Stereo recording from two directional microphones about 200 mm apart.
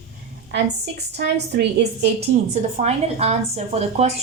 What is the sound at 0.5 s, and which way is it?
A woman's voice, 55° right (ahead or behind).